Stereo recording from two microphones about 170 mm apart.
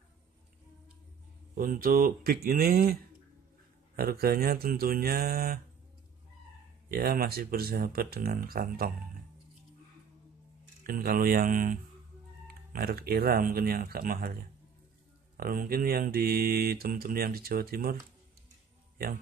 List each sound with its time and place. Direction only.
1.5 s mantra: 55° right (ahead or behind)
6.9 s mantra: 60° right (ahead or behind)
10.8 s mantra: 60° right (ahead or behind)